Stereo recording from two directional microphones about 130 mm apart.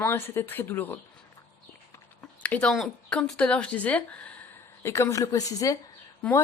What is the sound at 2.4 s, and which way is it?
Speech, 10° left (ahead or behind).